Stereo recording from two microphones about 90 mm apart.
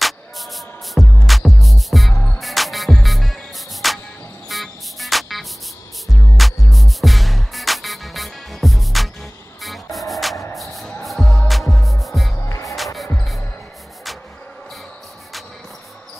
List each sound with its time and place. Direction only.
0.0 s music: centre (ahead or behind)
12.4 s music: 35° left (ahead or behind)
12.7 s music: centre (ahead or behind)